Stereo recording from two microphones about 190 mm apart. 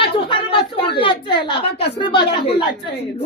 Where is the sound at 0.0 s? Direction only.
25° left (ahead or behind).